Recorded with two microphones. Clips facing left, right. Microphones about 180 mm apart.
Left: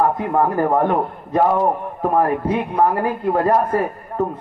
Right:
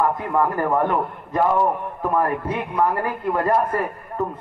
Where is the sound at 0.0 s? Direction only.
35° left (ahead or behind).